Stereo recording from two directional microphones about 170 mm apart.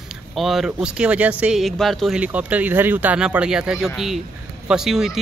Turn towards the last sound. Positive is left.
turn(degrees=-5)  # may be behind; listen again after turning